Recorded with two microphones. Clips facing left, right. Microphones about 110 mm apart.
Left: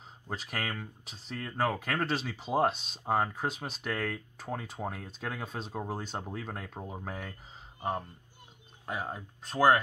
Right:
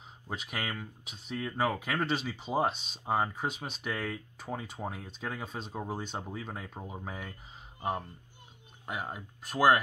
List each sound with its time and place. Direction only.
0.3 s speech: 5° right (ahead or behind)
8.8 s speech: 5° right (ahead or behind)
9.4 s speech: 30° left (ahead or behind)